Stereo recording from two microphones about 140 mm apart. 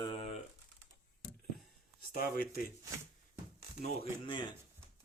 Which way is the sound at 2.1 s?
90° left.